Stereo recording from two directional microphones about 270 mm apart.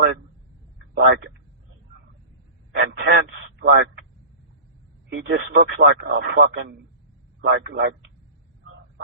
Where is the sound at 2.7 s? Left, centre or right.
Right.